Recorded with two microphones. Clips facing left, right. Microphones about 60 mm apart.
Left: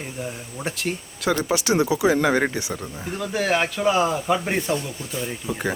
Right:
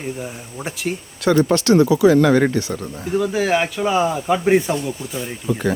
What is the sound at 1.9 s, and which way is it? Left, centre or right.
Speech, centre.